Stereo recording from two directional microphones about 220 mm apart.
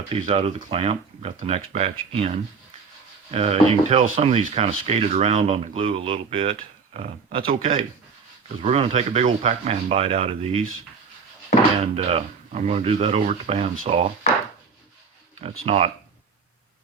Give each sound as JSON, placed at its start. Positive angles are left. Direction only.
{"t": 0.1, "sound": "speech", "side_deg": -25}
{"t": 11.8, "sound": "speech", "side_deg": -30}
{"t": 15.6, "sound": "speech", "side_deg": -30}